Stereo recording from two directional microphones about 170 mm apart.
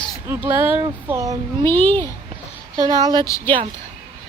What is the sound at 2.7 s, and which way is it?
Speech, 20° right (ahead or behind).